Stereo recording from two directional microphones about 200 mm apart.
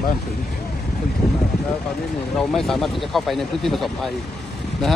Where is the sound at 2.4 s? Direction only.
Centre (ahead or behind).